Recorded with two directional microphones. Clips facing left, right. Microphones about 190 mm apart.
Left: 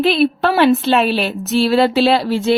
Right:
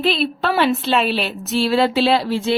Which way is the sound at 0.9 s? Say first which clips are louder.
Left 4 dB; 45° left (ahead or behind).